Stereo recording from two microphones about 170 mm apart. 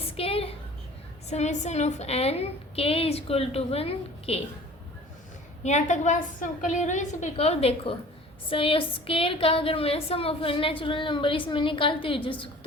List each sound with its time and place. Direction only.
0.2 s a sound: 35° left (ahead or behind)
1.3 s a woman's voice: 40° left (ahead or behind)
5.6 s a woman's voice: 45° left (ahead or behind)